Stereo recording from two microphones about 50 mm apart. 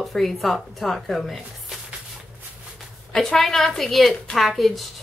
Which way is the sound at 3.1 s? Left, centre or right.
Centre.